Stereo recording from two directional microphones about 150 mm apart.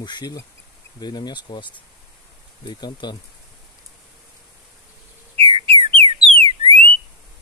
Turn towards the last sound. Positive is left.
turn(degrees=-40)  # may be behind; listen again after turning